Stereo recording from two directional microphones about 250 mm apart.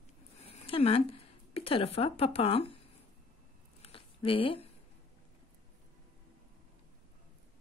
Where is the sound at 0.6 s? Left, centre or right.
Left.